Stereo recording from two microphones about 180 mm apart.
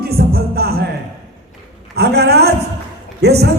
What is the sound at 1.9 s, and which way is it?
Music, 65° right (ahead or behind).